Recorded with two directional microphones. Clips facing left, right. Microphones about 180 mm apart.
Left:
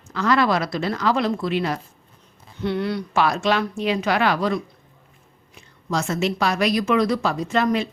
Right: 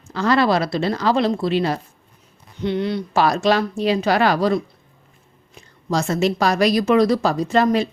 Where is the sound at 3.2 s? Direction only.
35° right (ahead or behind).